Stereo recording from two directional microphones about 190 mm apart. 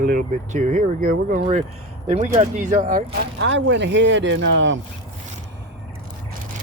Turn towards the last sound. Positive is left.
turn(degrees=-75)  # may be behind; listen again after turning